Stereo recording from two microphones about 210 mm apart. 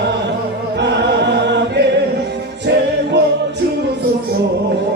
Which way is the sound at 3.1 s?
55° right (ahead or behind).